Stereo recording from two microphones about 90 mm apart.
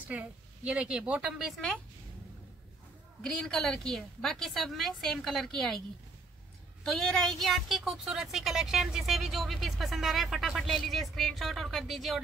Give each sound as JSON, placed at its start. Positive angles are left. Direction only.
{"t": 0.1, "sound": "a woman's voice", "side_deg": -15}
{"t": 3.2, "sound": "a woman's voice", "side_deg": 5}
{"t": 6.8, "sound": "a woman's voice", "side_deg": 10}